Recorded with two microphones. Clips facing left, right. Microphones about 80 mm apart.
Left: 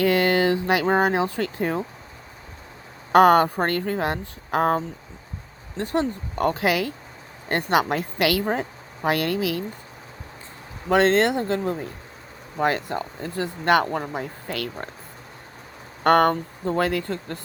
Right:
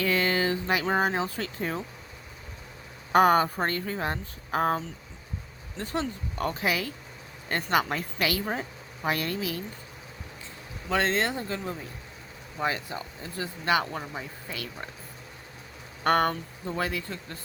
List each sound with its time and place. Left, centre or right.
0.0 s a sound: left
1.1 s speech: left
3.1 s speech: left
3.4 s speech: left
4.0 s speech: left
5.7 s speech: left
6.6 s speech: left
7.4 s speech: left
10.8 s speech: left
16.0 s speech: left